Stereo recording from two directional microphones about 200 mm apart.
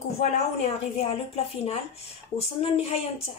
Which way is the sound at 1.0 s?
30° left (ahead or behind).